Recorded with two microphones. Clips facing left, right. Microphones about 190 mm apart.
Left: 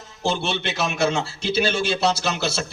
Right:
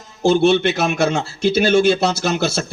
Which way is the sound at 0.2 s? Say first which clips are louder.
Right 11 dB; 50° right (ahead or behind).